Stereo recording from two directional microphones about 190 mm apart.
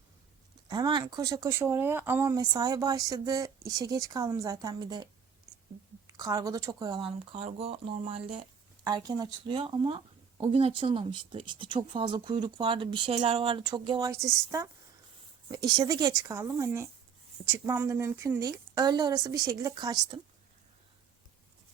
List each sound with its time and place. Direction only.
0.7 s speech: 20° right (ahead or behind)
6.1 s speech: 20° right (ahead or behind)